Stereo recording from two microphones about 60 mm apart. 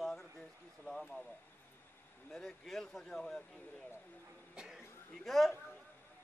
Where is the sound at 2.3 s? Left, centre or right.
Centre.